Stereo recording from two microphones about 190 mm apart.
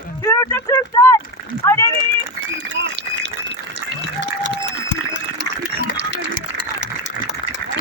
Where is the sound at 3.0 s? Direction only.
65° right (ahead or behind).